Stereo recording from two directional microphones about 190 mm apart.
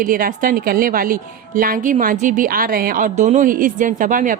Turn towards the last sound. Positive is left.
turn(degrees=-45)  # may be behind; listen again after turning